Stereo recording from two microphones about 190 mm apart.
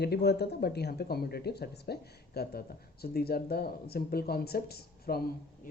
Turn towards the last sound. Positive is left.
turn(degrees=55)  # may be behind; listen again after turning